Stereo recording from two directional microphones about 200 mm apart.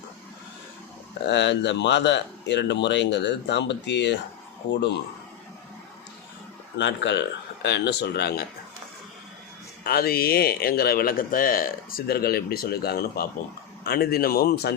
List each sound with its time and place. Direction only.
1.3 s speech: 60° left (ahead or behind)
6.7 s speech: 60° left (ahead or behind)
9.8 s speech: 50° left (ahead or behind)